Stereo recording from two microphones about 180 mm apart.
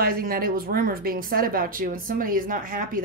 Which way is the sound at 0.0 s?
55° right (ahead or behind).